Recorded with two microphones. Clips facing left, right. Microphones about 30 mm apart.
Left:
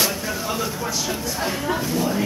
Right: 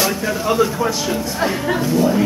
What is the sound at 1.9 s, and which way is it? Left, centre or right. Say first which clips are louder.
Speech: right 10 dB; centre.